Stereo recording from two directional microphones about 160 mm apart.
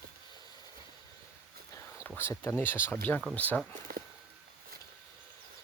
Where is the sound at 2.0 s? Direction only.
15° left (ahead or behind).